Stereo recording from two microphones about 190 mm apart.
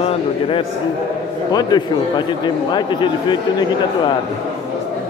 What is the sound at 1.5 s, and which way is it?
A man's voice, 20° left (ahead or behind).